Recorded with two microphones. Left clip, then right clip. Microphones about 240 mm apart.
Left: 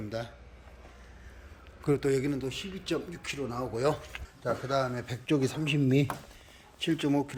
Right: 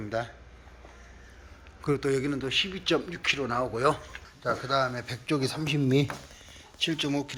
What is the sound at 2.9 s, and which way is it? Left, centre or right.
Speech, right.